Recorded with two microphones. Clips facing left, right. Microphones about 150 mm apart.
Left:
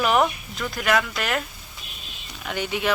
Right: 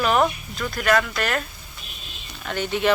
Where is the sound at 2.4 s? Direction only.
10° left (ahead or behind).